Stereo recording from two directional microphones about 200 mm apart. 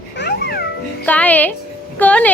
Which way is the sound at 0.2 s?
50° left (ahead or behind).